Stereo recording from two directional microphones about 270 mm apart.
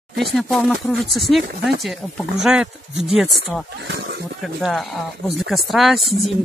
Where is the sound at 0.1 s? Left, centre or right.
Right.